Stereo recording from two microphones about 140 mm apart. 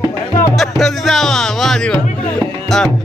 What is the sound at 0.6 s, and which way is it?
Speech, centre (ahead or behind).